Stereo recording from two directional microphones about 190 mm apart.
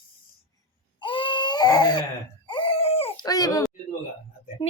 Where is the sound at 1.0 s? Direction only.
25° left (ahead or behind).